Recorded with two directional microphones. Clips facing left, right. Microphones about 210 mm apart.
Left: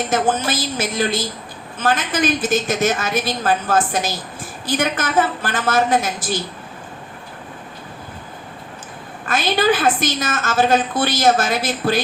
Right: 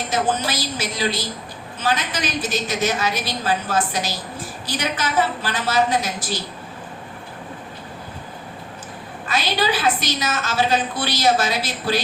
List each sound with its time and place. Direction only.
0.1 s a woman's voice: 50° left (ahead or behind)
9.2 s a woman's voice: 50° left (ahead or behind)